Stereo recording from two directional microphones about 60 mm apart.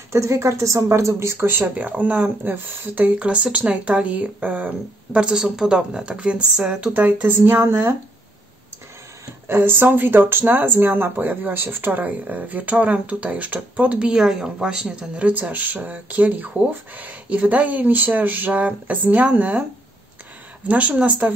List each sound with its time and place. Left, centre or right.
0.1 s speech: right
1.8 s speech: right
6.9 s speech: right
9.5 s speech: right; by 14.2 s centre
14.2 s speech: centre; by 19.6 s right
20.6 s speech: right